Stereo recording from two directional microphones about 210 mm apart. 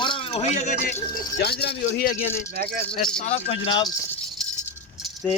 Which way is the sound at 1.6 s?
50° left (ahead or behind).